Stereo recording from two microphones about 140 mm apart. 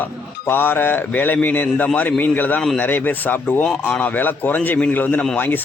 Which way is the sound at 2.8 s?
15° left (ahead or behind).